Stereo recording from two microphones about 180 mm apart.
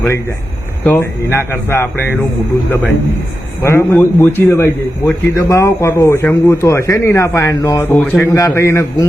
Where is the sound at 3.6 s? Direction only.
10° left (ahead or behind).